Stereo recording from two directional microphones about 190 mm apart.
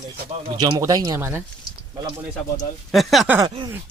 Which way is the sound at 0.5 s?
20° right (ahead or behind).